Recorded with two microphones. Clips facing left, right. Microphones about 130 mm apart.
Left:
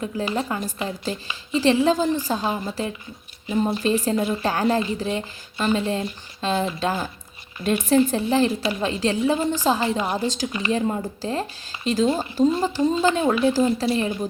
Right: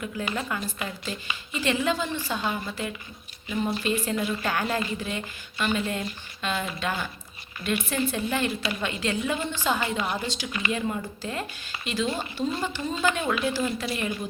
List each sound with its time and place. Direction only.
0.0 s speech: 30° left (ahead or behind)